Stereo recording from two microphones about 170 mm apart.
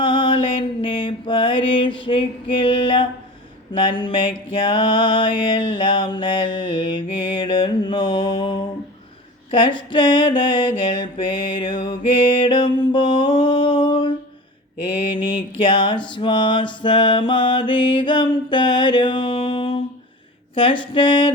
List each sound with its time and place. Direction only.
0.0 s mantra: 30° left (ahead or behind)
15.5 s mantra: 30° left (ahead or behind)